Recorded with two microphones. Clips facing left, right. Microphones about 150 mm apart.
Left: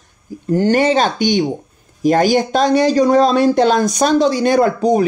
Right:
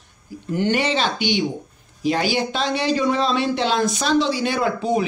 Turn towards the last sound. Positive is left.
turn(degrees=45)  # may be behind; listen again after turning